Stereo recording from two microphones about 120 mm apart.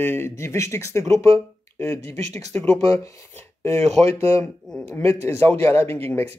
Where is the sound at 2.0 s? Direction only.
65° right (ahead or behind).